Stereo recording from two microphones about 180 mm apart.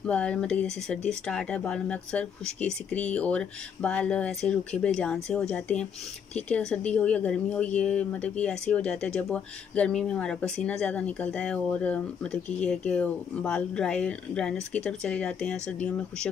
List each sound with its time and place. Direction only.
0.0 s speech: 5° left (ahead or behind)